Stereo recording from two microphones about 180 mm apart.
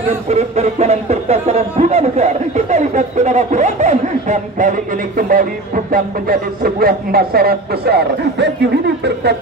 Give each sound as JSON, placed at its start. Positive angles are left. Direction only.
{"t": 0.3, "sound": "speech", "side_deg": -40}